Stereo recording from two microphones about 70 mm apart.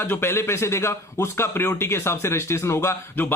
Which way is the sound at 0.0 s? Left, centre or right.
Left.